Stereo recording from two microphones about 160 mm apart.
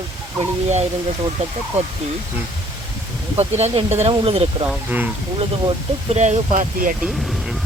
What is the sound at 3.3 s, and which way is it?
Speech, 40° right (ahead or behind).